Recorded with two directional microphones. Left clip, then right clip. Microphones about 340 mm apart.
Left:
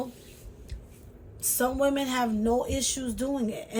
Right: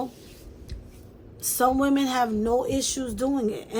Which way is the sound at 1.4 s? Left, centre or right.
Centre.